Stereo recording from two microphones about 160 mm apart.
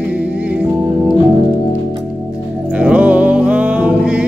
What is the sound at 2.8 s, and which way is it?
Music, 10° right (ahead or behind).